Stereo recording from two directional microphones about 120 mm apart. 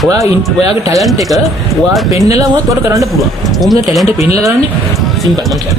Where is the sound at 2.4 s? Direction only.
30° right (ahead or behind).